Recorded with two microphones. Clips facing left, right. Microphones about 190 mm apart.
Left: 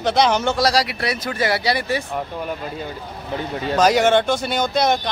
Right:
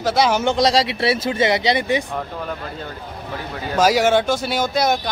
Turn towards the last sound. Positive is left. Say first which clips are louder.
# even
turn(degrees=0)  # may be behind; listen again after turning